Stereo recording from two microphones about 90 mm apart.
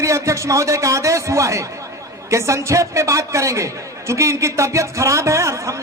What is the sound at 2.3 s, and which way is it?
Speech, 35° right (ahead or behind).